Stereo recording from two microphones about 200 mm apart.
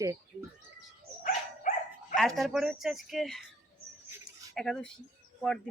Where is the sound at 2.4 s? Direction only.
Centre (ahead or behind).